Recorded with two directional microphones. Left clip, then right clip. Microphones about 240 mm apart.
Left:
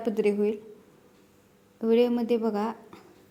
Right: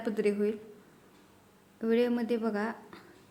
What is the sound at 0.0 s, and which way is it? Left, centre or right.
Speech, centre.